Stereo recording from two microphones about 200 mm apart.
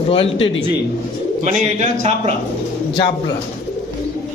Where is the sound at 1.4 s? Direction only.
35° right (ahead or behind).